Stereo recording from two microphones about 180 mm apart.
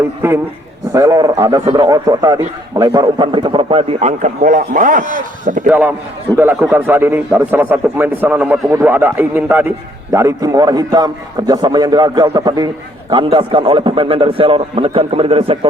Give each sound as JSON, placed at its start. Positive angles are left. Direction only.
{"t": 0.9, "sound": "a man's voice", "side_deg": -20}
{"t": 6.3, "sound": "a man's voice", "side_deg": -10}